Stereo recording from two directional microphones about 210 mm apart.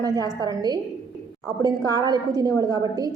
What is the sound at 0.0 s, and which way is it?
A woman's voice, 15° right (ahead or behind).